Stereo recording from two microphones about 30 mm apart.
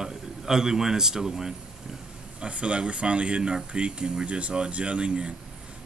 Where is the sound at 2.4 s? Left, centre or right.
Right.